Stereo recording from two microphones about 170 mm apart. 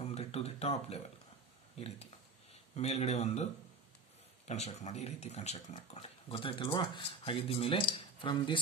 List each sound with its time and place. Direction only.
0.0 s a sound: 35° left (ahead or behind)
1.8 s speech: 40° left (ahead or behind)
4.5 s speech: 40° left (ahead or behind)